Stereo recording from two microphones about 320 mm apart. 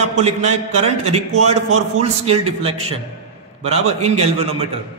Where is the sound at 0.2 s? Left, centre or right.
Right.